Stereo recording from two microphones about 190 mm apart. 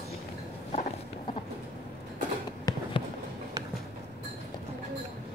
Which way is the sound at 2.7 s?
20° left (ahead or behind).